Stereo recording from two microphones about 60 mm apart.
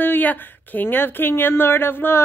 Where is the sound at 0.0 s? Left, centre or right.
Left.